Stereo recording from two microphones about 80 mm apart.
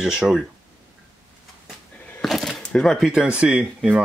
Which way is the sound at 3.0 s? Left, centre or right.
Centre.